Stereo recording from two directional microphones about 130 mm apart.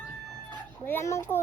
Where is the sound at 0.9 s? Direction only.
20° left (ahead or behind).